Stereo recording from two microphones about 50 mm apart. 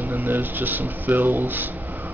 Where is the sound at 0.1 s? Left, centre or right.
Right.